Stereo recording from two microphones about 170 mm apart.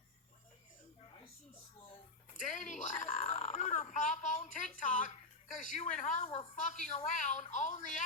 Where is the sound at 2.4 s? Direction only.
45° left (ahead or behind).